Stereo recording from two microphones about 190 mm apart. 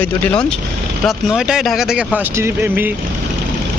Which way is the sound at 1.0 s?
5° right (ahead or behind).